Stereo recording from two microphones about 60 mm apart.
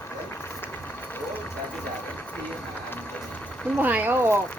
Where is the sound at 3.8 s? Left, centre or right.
Right.